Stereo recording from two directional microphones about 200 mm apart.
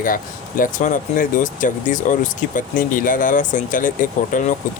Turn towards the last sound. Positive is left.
turn(degrees=40)  # may be behind; listen again after turning